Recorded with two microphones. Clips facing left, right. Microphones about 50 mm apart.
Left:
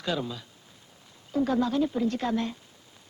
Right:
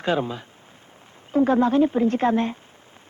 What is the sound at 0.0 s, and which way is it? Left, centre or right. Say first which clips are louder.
A woman's voice: right 7 dB; right.